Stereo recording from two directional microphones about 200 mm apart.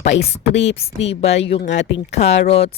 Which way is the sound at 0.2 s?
30° left (ahead or behind).